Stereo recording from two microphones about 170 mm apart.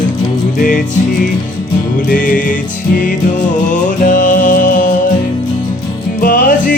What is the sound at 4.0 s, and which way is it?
Music, 50° left (ahead or behind).